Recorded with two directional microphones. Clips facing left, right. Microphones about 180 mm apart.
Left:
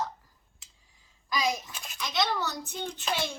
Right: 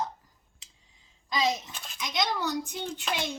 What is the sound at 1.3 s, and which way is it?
A child's voice, 25° right (ahead or behind).